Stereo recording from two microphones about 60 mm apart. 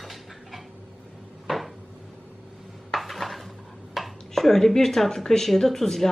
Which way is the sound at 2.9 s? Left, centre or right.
Centre.